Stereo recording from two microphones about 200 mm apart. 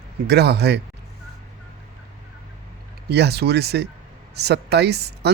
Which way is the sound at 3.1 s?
55° right (ahead or behind).